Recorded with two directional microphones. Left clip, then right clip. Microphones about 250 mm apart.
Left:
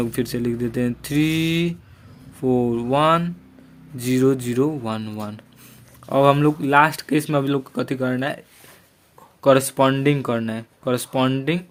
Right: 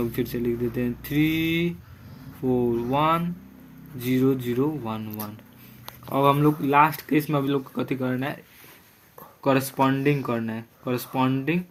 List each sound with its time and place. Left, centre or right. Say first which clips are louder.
0.0 s speech: left 3 dB; left
9.4 s speech: left 6 dB; left